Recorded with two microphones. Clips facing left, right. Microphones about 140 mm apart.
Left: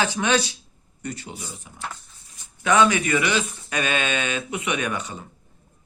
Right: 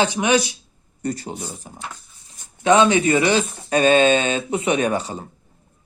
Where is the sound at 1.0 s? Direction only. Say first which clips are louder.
Right 7 dB; 40° right (ahead or behind).